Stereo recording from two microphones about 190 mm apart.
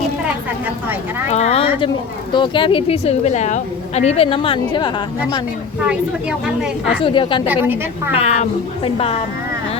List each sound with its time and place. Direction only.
1.3 s a woman's voice: 35° left (ahead or behind)
6.4 s a woman's voice: 5° right (ahead or behind)
7.0 s a woman's voice: 25° left (ahead or behind)
7.4 s a woman's voice: 10° right (ahead or behind)
8.1 s speech: 35° left (ahead or behind)